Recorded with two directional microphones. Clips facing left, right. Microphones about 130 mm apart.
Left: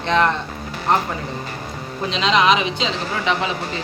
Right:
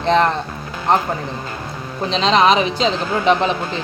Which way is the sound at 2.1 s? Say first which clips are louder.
Right 3 dB; 35° right (ahead or behind).